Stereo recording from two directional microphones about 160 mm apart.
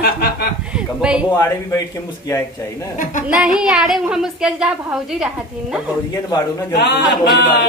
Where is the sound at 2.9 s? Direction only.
55° left (ahead or behind).